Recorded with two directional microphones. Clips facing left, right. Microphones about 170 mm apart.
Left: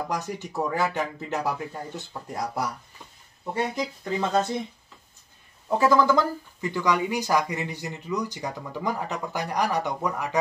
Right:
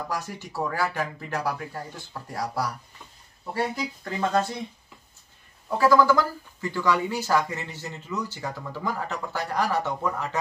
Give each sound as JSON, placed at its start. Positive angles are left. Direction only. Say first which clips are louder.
{"t": 0.1, "sound": "speech", "louder": "left 2 dB", "side_deg": 20}
{"t": 5.7, "sound": "speech", "louder": "right 1 dB", "side_deg": 20}